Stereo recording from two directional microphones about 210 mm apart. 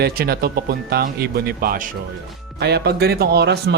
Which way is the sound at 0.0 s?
45° right (ahead or behind).